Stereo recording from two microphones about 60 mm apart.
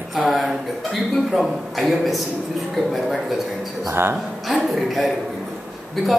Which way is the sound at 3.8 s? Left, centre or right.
Right.